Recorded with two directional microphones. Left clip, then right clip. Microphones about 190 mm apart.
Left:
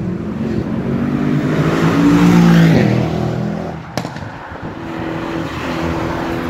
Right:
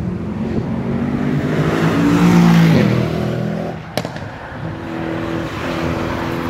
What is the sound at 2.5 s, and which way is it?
Vehicle, 45° right (ahead or behind).